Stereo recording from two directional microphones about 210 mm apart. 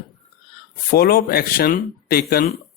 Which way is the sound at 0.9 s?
45° left (ahead or behind).